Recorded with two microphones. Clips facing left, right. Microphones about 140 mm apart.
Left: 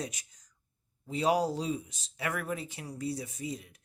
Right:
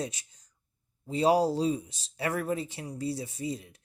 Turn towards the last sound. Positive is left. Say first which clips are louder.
# right 4 dB
turn(degrees=-30)  # may be behind; listen again after turning